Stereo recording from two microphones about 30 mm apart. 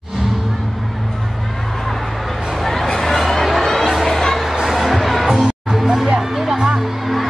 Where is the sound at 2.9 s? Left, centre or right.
Centre.